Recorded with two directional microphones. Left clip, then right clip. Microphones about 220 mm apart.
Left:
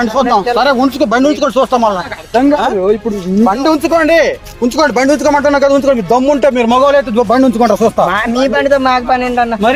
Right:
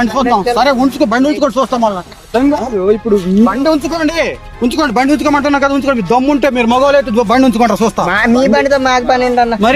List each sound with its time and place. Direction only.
0.0 s speech: 45° right (ahead or behind)
0.9 s speech: 30° right (ahead or behind)
2.3 s speech: 35° right (ahead or behind)
3.4 s speech: centre (ahead or behind)
4.6 s speech: 45° right (ahead or behind)
8.0 s speech: 25° right (ahead or behind)